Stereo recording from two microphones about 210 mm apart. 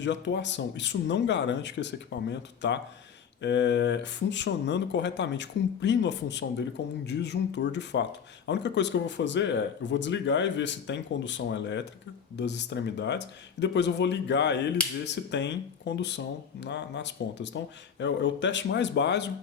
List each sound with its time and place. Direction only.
0.0 s speech: 60° left (ahead or behind)